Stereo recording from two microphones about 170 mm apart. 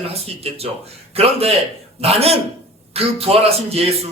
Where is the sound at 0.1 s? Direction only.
35° right (ahead or behind).